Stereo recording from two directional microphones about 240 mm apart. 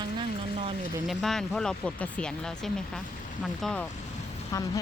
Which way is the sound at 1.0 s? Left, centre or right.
Centre.